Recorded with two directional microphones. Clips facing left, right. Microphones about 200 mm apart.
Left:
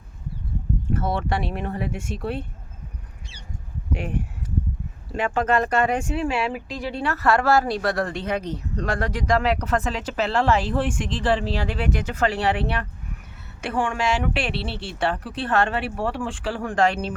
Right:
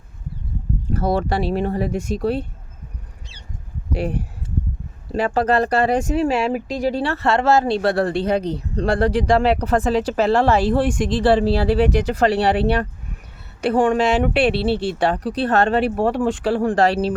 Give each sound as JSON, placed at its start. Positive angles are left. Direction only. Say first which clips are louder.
{"t": 0.9, "sound": "speech", "louder": "right 6 dB", "side_deg": -35}
{"t": 3.9, "sound": "a sound", "louder": "right 5 dB", "side_deg": -35}
{"t": 5.1, "sound": "speech", "louder": "right 4 dB", "side_deg": -35}